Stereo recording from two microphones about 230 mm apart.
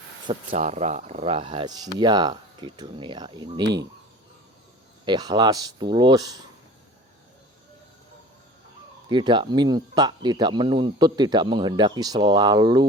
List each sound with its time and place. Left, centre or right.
0.3 s speech: right
5.0 s speech: centre
9.0 s speech: centre